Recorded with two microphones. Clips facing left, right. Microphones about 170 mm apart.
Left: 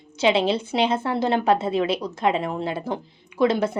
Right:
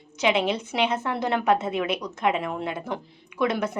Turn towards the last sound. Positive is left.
turn(degrees=30)  # may be behind; listen again after turning